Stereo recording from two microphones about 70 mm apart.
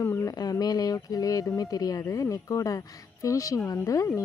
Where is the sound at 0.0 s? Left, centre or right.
Left.